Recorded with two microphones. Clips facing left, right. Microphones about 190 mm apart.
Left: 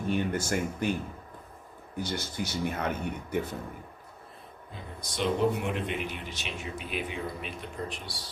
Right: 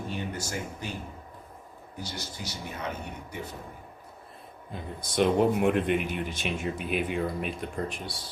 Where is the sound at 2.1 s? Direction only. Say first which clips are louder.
Left 7 dB; 55° left (ahead or behind).